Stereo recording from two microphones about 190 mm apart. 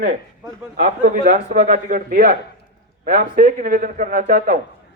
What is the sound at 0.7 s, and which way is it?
A man's voice, 40° right (ahead or behind).